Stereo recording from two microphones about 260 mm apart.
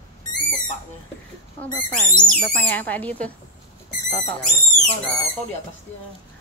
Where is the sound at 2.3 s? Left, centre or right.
Centre.